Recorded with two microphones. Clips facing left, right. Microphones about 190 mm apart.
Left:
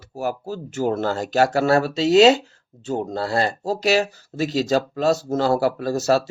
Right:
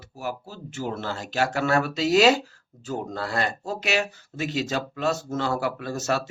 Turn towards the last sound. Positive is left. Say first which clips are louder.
# left 7 dB
turn(degrees=35)  # may be behind; listen again after turning